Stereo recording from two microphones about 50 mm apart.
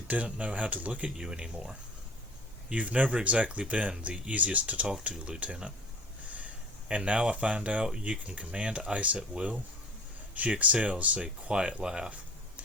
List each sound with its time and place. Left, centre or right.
0.1 s speech: right
1.1 s speech: centre
2.7 s speech: right
11.5 s speech: centre